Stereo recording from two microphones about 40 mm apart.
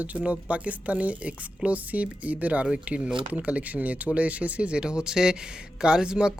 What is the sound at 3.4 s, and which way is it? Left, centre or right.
Speech, right.